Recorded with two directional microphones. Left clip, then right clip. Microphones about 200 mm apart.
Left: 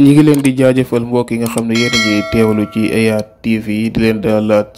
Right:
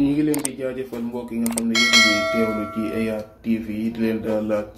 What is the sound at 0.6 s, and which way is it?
Speech, 55° left (ahead or behind).